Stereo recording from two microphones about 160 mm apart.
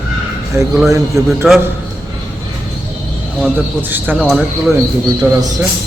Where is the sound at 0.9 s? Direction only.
20° right (ahead or behind).